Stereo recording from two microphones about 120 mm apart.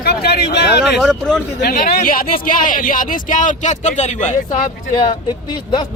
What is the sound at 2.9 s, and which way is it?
Speech, 90° left.